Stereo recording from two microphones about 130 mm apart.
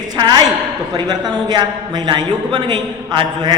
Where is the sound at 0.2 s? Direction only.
30° right (ahead or behind).